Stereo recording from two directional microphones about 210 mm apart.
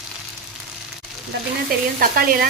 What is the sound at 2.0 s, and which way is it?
Speech, 45° right (ahead or behind).